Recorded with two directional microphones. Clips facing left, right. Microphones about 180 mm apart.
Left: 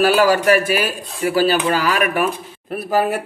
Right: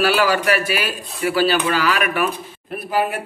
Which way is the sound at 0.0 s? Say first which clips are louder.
Left 4 dB; 40° left (ahead or behind).